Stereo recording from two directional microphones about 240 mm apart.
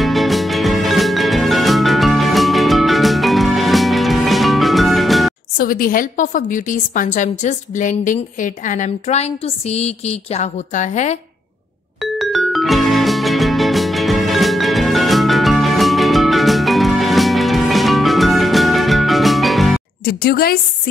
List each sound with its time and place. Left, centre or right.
0.0 s music: centre
5.6 s a woman's voice: left
12.0 s music: centre
20.1 s a woman's voice: left